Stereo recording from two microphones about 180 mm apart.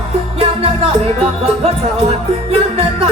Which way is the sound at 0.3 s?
35° right (ahead or behind).